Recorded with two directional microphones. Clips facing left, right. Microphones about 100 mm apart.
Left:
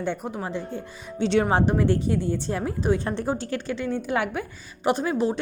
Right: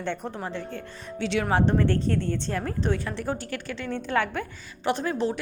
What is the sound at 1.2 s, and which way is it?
Speech, 35° left (ahead or behind).